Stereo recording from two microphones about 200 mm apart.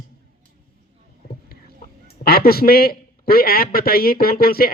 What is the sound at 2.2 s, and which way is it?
A man's voice, 50° left (ahead or behind).